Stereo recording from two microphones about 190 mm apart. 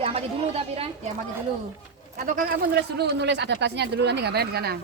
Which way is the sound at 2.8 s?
60° right (ahead or behind).